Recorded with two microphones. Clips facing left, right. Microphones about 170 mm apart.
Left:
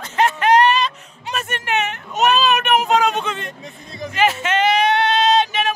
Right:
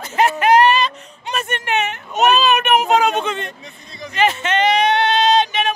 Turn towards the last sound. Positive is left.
turn(degrees=5)  # may be behind; listen again after turning